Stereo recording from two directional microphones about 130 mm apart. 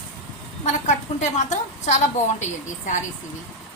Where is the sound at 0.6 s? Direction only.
65° left (ahead or behind).